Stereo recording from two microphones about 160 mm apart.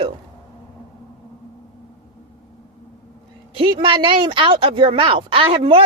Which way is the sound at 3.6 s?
30° right (ahead or behind).